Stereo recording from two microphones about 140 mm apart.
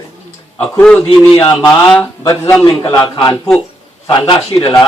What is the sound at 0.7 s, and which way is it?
Speech, 10° left (ahead or behind).